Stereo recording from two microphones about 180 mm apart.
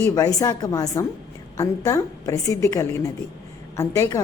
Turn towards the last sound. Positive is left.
turn(degrees=15)  # may be behind; listen again after turning